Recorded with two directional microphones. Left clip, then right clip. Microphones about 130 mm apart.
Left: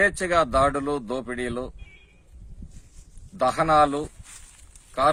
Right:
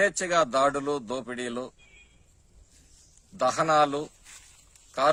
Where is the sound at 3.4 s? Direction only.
15° right (ahead or behind).